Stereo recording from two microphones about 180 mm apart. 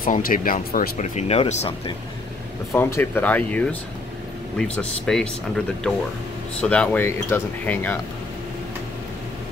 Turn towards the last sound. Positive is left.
turn(degrees=10)  # may be behind; listen again after turning